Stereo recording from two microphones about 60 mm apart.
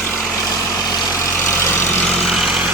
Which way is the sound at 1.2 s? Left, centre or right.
Left.